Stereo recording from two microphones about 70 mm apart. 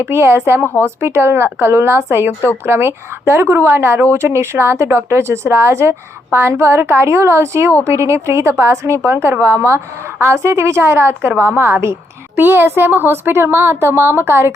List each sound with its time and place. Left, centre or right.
0.0 s a woman's voice: right